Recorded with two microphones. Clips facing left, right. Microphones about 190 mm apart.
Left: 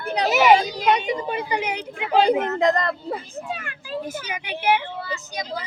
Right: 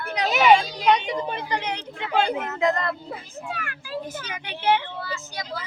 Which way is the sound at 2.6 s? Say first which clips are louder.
Left 3 dB; 35° left (ahead or behind).